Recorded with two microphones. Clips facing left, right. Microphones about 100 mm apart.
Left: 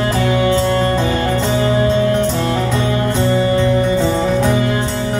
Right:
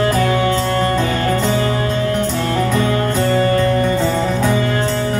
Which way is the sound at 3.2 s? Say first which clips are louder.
Even; 15° left (ahead or behind).